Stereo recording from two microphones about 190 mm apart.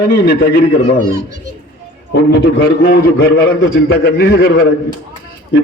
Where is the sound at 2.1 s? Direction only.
65° left (ahead or behind).